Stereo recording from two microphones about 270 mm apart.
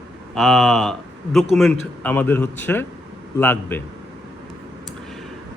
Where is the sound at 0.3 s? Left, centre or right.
Centre.